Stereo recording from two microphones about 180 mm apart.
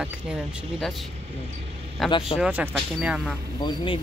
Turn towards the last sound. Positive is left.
turn(degrees=25)  # may be behind; listen again after turning